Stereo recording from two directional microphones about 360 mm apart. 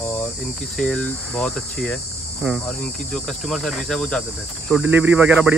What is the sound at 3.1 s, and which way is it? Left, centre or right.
Speech, centre.